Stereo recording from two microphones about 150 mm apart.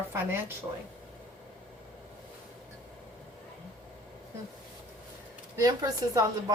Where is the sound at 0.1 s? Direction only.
15° right (ahead or behind).